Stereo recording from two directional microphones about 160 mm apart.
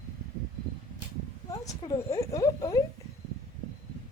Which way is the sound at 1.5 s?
25° left (ahead or behind).